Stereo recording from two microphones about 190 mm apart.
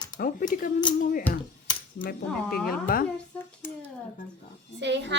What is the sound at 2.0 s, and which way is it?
Speech, 50° left (ahead or behind).